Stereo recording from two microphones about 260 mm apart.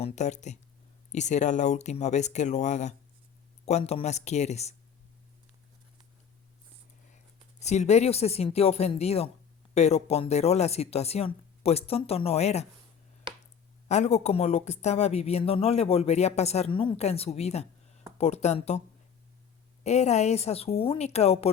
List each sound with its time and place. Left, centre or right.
0.0 s speech: left
7.6 s speech: left
13.8 s speech: left
19.8 s speech: left